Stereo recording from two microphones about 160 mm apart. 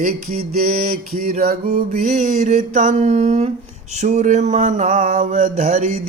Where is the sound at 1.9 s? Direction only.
45° right (ahead or behind).